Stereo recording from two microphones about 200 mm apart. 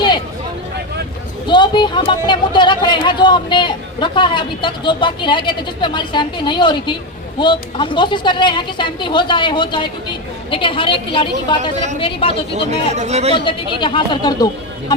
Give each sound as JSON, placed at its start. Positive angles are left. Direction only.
{"t": 1.5, "sound": "speech", "side_deg": 25}
{"t": 13.0, "sound": "speech", "side_deg": -35}
{"t": 13.3, "sound": "speech", "side_deg": 25}